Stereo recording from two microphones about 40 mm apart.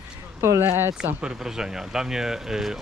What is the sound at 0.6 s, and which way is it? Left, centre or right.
Speech, right.